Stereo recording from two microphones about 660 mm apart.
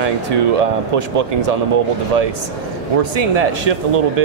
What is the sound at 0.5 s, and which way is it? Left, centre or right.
Speech, right.